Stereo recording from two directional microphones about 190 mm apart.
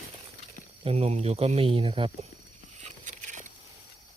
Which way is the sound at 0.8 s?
35° right (ahead or behind).